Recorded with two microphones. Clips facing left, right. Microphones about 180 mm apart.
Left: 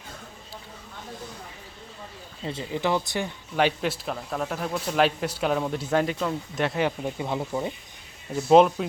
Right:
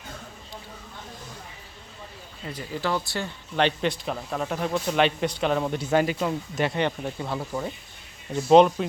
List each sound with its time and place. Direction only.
2.4 s speech: 25° left (ahead or behind)
3.5 s speech: 5° left (ahead or behind)
8.3 s speech: 5° left (ahead or behind)